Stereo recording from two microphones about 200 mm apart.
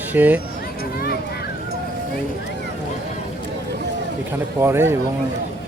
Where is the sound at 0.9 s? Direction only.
50° left (ahead or behind).